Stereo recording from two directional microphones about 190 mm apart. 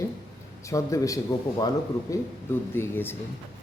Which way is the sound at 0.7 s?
15° left (ahead or behind).